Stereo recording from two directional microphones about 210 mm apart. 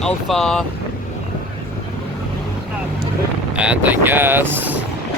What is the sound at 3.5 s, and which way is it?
Speech, 5° right (ahead or behind).